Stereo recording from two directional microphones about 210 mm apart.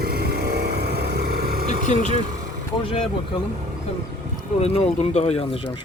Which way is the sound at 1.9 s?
35° left (ahead or behind).